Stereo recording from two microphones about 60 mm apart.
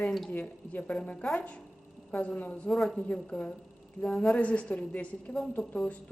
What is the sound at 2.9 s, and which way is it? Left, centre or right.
A woman's voice, centre.